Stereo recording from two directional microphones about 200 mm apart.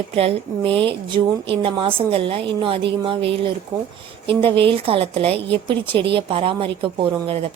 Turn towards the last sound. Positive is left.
turn(degrees=-30)  # may be behind; listen again after turning